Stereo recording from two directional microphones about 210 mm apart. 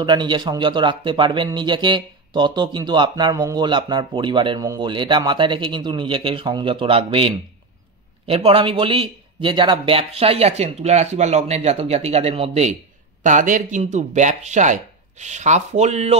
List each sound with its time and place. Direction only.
0.0 s speech: 20° right (ahead or behind)